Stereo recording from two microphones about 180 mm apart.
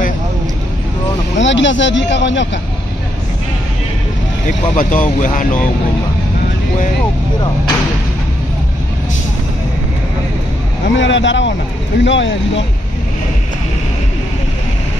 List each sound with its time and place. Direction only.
1.4 s speech: 90° left
4.5 s speech: 45° left (ahead or behind)
11.0 s speech: 90° left